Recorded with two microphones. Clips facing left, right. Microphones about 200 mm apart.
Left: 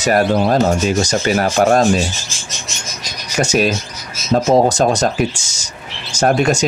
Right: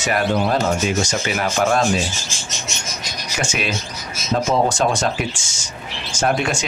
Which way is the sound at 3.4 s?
40° left (ahead or behind).